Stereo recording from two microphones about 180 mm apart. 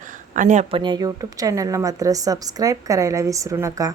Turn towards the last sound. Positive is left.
turn(degrees=-15)  # may be behind; listen again after turning